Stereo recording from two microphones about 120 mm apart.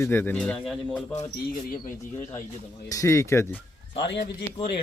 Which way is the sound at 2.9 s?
25° left (ahead or behind).